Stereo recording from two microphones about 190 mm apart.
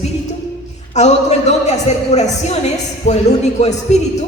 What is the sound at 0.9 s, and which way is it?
A man's voice, 35° left (ahead or behind).